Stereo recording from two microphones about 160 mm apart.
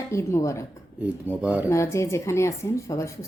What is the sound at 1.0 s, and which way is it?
Speech, 10° right (ahead or behind).